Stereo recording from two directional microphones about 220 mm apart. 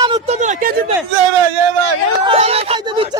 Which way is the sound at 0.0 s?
20° right (ahead or behind).